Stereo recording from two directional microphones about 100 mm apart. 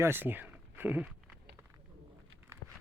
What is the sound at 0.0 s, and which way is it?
Speech, 20° right (ahead or behind).